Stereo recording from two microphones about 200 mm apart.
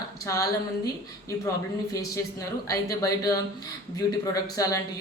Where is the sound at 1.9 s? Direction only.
15° left (ahead or behind).